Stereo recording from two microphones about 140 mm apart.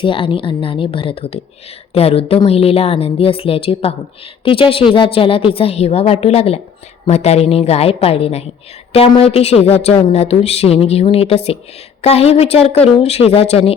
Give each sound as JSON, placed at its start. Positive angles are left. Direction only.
{"t": 0.0, "sound": "a woman's voice", "side_deg": 40}